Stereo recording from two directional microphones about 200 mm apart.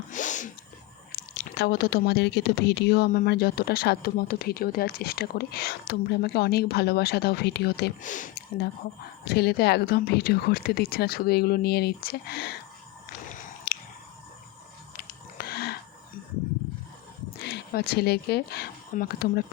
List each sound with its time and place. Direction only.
0.1 s sneeze: 40° left (ahead or behind)
1.1 s speech: 50° left (ahead or behind)
8.0 s speech: 40° left (ahead or behind)
9.2 s speech: 55° left (ahead or behind)
13.3 s a sound: 40° left (ahead or behind)
14.9 s a sound: 50° left (ahead or behind)
17.4 s speech: 55° left (ahead or behind)